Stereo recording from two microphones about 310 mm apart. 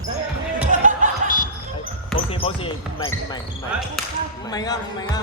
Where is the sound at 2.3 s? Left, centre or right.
Centre.